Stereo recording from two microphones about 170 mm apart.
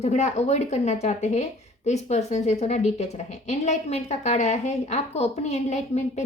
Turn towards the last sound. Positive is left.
turn(degrees=40)  # may be behind; listen again after turning